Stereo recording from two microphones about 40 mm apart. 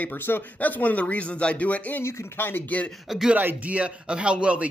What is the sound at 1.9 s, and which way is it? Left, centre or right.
Speech, left.